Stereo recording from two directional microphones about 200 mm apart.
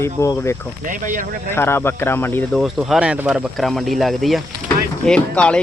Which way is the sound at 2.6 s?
5° right (ahead or behind).